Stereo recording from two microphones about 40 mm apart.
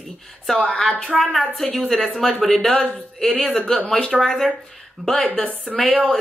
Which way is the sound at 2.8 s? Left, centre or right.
Left.